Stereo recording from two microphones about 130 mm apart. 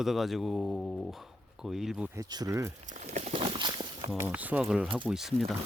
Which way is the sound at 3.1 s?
60° right (ahead or behind).